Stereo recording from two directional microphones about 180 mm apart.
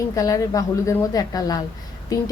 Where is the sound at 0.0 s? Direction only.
20° left (ahead or behind).